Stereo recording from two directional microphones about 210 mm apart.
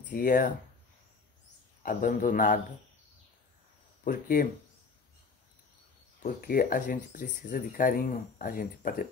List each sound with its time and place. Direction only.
0.1 s speech: 40° left (ahead or behind)
1.8 s speech: 40° left (ahead or behind)
4.0 s speech: 40° left (ahead or behind)
6.2 s speech: 45° left (ahead or behind)